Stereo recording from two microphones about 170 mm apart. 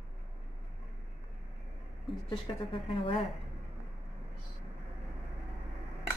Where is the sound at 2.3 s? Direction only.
30° left (ahead or behind).